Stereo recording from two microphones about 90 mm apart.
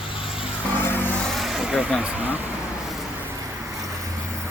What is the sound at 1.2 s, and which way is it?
Vehicle, centre (ahead or behind).